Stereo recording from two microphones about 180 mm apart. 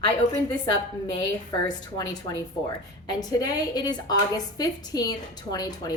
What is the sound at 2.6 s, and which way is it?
A woman's voice, 20° left (ahead or behind).